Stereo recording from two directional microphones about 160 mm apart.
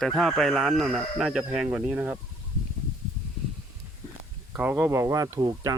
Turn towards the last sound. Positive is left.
turn(degrees=-25)  # may be behind; listen again after turning